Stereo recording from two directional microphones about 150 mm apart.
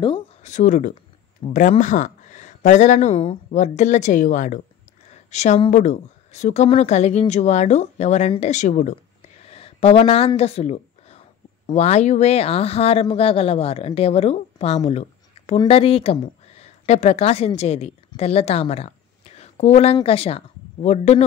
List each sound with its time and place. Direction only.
0.4 s speech: 55° left (ahead or behind)
5.1 s a sound: 50° left (ahead or behind)
5.7 s speech: 55° left (ahead or behind)
9.5 s a woman's voice: 40° left (ahead or behind)